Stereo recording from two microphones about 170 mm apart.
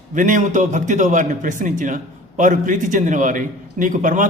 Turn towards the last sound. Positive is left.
turn(degrees=-50)  # may be behind; listen again after turning